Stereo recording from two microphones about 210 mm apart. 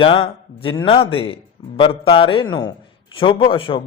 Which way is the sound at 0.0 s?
25° left (ahead or behind).